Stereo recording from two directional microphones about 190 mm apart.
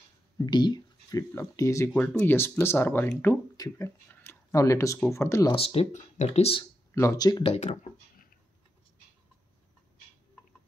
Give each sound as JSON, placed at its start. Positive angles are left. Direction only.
{"t": 0.5, "sound": "speech", "side_deg": 20}
{"t": 5.6, "sound": "speech", "side_deg": 30}
{"t": 6.9, "sound": "speech", "side_deg": 15}
{"t": 7.5, "sound": "a sound", "side_deg": 40}